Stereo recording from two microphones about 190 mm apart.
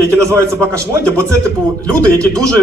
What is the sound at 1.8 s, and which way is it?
Speech, 5° left (ahead or behind).